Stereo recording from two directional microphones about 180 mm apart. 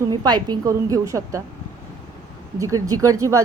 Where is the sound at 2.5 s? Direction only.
15° right (ahead or behind).